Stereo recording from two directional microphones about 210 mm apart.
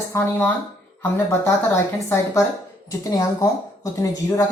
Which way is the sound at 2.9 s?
15° left (ahead or behind).